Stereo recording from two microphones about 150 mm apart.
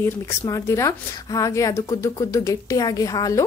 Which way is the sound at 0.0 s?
20° left (ahead or behind).